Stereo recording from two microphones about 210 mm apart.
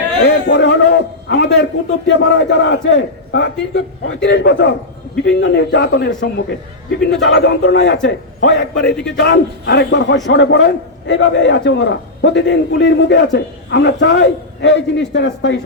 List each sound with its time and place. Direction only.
0.3 s a sound: 55° left (ahead or behind)
2.0 s a man's voice: 55° left (ahead or behind)
8.9 s a man's voice: 5° left (ahead or behind)
9.1 s a man's voice: 55° left (ahead or behind)